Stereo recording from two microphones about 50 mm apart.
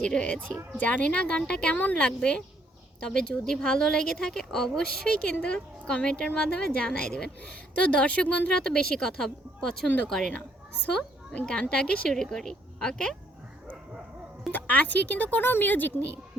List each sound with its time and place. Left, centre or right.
0.0 s speech: centre
0.8 s speech: left
1.8 s speech: left
2.0 s speech: centre
7.4 s speech: left; by 10.3 s centre
10.8 s a woman's voice: left
14.5 s speech: left